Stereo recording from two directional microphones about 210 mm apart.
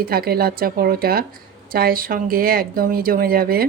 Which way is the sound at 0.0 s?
45° right (ahead or behind).